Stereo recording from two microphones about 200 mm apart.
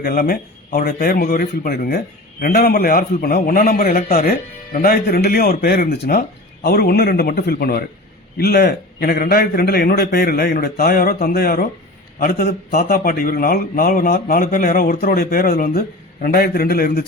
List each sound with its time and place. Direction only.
0.0 s a man's voice: 45° left (ahead or behind)